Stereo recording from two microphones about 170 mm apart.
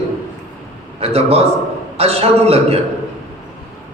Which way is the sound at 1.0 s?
35° right (ahead or behind).